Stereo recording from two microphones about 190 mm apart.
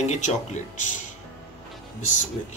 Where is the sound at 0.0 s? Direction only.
40° left (ahead or behind).